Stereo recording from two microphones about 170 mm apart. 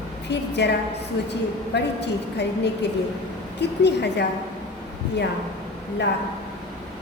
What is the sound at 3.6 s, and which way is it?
Speech, 80° left.